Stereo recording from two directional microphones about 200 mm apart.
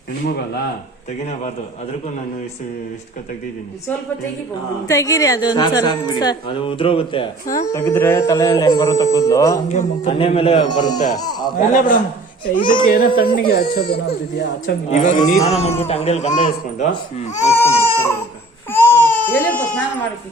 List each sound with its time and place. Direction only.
4.9 s a woman's voice: 15° left (ahead or behind)
7.4 s speech: 40° left (ahead or behind)
7.7 s music: 15° left (ahead or behind)
9.6 s a woman's voice: 35° left (ahead or behind); by 11.5 s 20° left (ahead or behind)
11.5 s speech: 40° left (ahead or behind)
14.8 s speech: 40° left (ahead or behind)
17.5 s goat: 10° left (ahead or behind)
18.7 s crying: 10° left (ahead or behind)